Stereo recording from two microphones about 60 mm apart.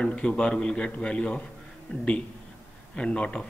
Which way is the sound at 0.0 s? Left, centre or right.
Centre.